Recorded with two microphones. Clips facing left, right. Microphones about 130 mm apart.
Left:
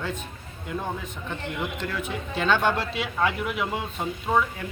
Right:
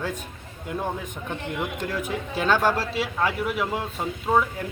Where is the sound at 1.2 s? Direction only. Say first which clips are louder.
Right 1 dB; 15° right (ahead or behind).